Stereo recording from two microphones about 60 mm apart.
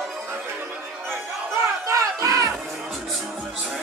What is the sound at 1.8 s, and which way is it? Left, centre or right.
Battle cry, right.